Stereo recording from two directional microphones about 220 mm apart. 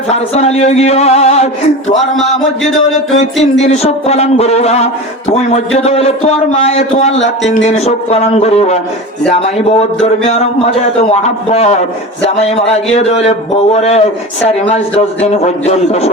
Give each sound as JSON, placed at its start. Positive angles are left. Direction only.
{"t": 0.1, "sound": "a man's voice", "side_deg": 30}
{"t": 3.6, "sound": "a man's voice", "side_deg": 30}
{"t": 10.2, "sound": "a sound", "side_deg": 30}
{"t": 11.1, "sound": "a man's voice", "side_deg": 30}